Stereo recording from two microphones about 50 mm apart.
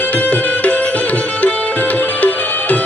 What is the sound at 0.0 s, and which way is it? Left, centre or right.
Music, left.